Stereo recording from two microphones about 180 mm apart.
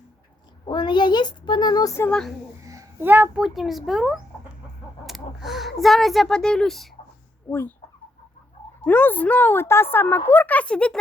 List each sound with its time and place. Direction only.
0.6 s speech: 25° left (ahead or behind)
2.0 s a child's voice: 5° left (ahead or behind)
2.6 s a child's voice: 15° right (ahead or behind); by 7.6 s 5° left (ahead or behind)
8.8 s speech: 10° left (ahead or behind)